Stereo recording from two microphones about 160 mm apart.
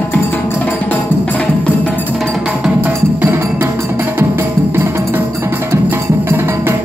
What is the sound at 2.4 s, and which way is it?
Music, 10° right (ahead or behind).